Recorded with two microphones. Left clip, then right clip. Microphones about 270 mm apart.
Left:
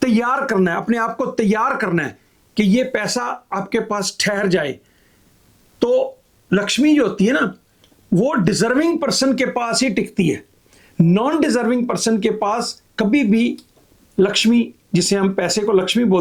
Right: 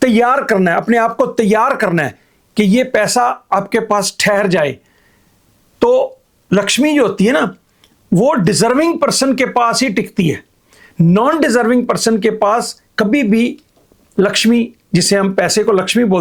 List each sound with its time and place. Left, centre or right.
0.0 s speech: right
5.8 s speech: right